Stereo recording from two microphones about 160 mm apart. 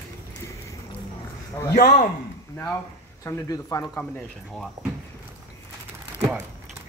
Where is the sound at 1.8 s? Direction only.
50° left (ahead or behind).